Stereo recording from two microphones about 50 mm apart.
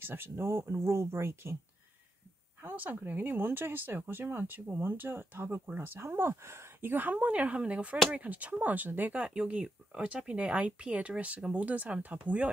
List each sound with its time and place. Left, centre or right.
0.0 s speech: right
2.6 s speech: right
9.2 s speech: right